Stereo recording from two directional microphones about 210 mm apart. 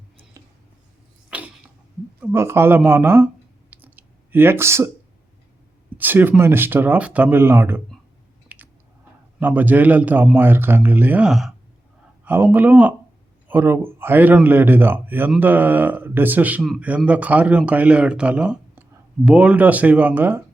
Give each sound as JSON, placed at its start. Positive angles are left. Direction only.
{"t": 1.3, "sound": "creak", "side_deg": -5}
{"t": 2.2, "sound": "speech", "side_deg": -10}
{"t": 3.7, "sound": "clicking", "side_deg": -10}
{"t": 6.0, "sound": "speech", "side_deg": -10}
{"t": 8.4, "sound": "chewing", "side_deg": -10}
{"t": 9.4, "sound": "speech", "side_deg": -10}